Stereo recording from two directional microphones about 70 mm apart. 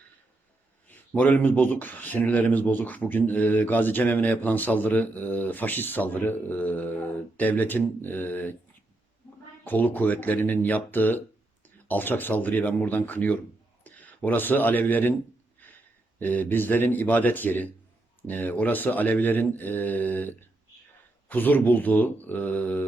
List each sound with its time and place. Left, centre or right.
0.9 s speech: left
9.6 s speech: left
15.6 s a sound: left
16.1 s speech: left